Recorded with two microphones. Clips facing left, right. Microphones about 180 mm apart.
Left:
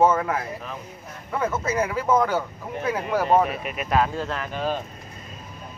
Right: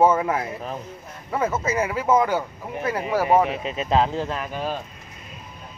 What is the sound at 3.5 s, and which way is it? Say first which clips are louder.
Speech: right 2 dB; 25° right (ahead or behind).